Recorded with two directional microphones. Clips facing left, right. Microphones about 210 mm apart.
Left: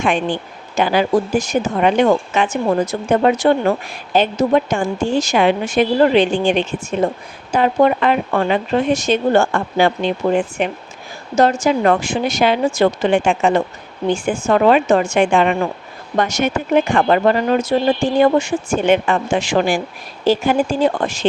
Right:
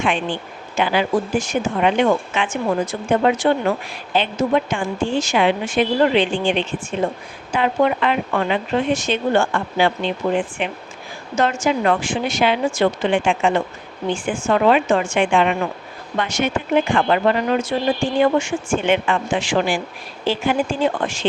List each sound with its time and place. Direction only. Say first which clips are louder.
0.0 s speech: left 3 dB; 45° left (ahead or behind)